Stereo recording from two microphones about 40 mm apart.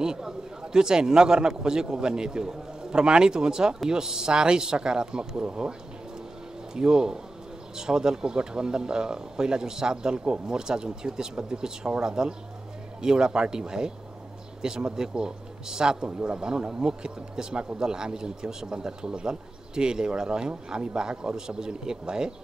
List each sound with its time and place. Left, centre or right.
0.0 s speech: centre